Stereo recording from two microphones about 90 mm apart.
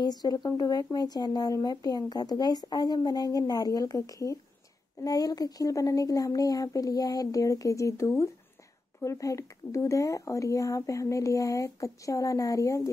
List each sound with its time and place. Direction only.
0.0 s speech: 50° left (ahead or behind)